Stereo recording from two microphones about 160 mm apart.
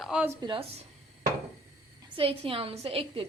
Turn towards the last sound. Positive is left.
turn(degrees=-35)  # may be behind; listen again after turning